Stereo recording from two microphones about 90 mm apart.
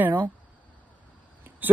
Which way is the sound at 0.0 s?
20° right (ahead or behind).